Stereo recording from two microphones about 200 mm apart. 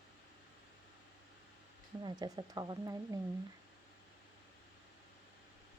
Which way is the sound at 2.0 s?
20° right (ahead or behind).